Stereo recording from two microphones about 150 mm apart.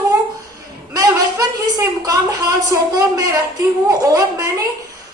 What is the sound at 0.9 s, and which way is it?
A woman's voice, 25° right (ahead or behind).